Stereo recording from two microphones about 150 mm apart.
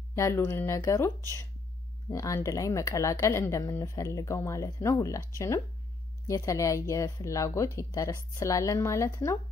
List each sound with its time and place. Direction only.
0.1 s speech: 20° left (ahead or behind)
6.2 s speech: 20° left (ahead or behind)